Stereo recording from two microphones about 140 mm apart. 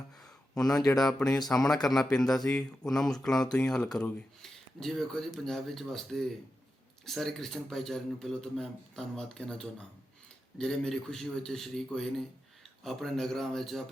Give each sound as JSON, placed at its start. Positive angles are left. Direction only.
{"t": 0.6, "sound": "speech", "side_deg": 25}
{"t": 1.5, "sound": "speech", "side_deg": 5}